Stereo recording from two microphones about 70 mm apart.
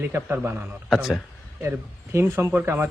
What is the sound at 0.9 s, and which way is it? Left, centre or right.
Speech, centre.